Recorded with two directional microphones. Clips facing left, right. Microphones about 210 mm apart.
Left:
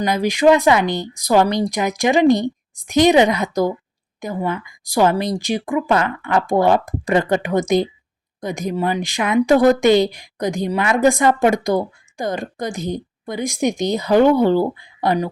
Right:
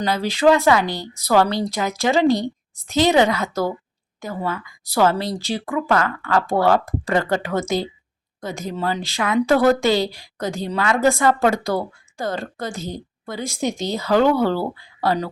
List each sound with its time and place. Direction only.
0.0 s speech: 15° left (ahead or behind)